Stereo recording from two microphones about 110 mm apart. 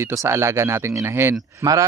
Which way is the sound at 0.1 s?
25° right (ahead or behind).